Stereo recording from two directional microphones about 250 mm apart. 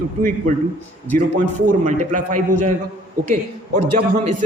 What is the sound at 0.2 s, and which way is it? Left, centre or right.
Speech, right.